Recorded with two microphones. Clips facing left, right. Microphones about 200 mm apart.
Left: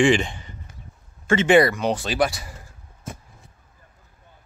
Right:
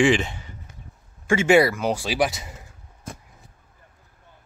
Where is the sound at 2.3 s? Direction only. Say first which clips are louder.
Even; 20° right (ahead or behind).